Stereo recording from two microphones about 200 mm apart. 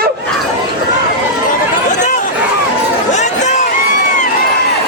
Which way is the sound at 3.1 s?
35° left (ahead or behind).